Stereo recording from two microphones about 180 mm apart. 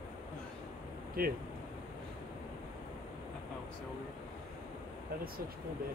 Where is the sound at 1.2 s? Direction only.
55° right (ahead or behind).